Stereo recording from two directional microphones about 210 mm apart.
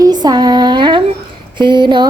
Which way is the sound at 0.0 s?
20° right (ahead or behind).